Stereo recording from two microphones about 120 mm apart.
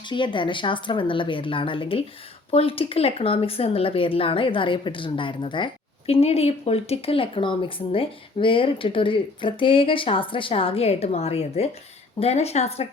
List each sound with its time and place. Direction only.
0.0 s speech: 40° left (ahead or behind); by 12.9 s 65° left (ahead or behind)